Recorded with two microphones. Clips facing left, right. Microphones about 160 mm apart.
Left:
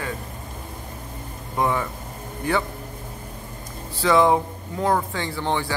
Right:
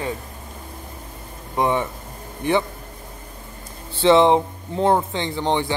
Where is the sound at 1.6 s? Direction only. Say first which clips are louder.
Right 2 dB; 25° right (ahead or behind).